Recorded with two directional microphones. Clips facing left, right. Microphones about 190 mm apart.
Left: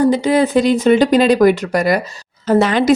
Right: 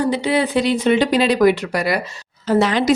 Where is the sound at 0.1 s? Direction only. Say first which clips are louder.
Left 5 dB; 45° left (ahead or behind).